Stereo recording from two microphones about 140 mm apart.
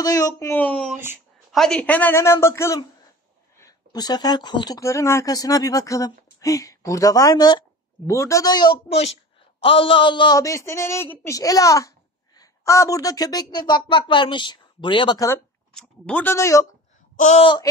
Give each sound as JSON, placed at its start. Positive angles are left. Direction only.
{"t": 0.0, "sound": "a sound", "side_deg": 25}
{"t": 0.5, "sound": "speech", "side_deg": 10}
{"t": 0.9, "sound": "speech", "side_deg": -15}
{"t": 1.5, "sound": "speech", "side_deg": 5}
{"t": 15.7, "sound": "speech", "side_deg": 5}
{"t": 17.4, "sound": "speech", "side_deg": 35}